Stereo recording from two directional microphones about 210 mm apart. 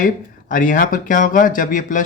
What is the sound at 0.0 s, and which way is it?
Speech, 40° left (ahead or behind).